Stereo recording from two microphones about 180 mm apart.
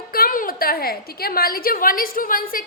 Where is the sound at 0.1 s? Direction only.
50° left (ahead or behind).